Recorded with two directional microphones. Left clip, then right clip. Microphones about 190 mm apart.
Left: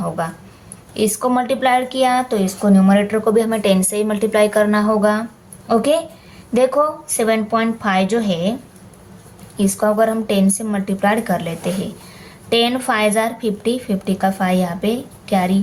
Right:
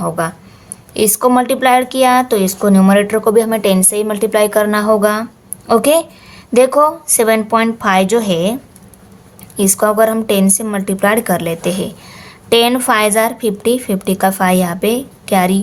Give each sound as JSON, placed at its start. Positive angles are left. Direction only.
{"t": 0.0, "sound": "a woman's voice", "side_deg": -35}
{"t": 9.6, "sound": "a woman's voice", "side_deg": -40}